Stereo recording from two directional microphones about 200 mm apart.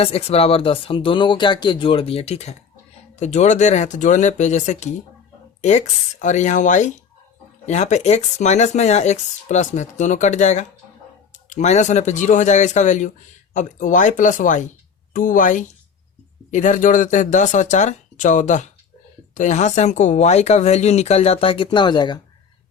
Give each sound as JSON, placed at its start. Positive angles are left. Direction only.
{"t": 0.0, "sound": "speech", "side_deg": 30}